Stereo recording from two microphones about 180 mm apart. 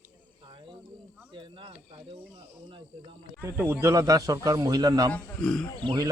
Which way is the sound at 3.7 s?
15° right (ahead or behind).